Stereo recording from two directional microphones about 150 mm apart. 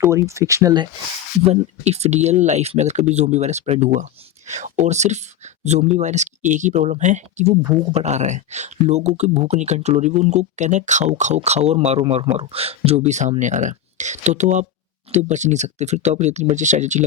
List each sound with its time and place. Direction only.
0.0 s speech: 20° right (ahead or behind)
1.5 s speech: 45° right (ahead or behind)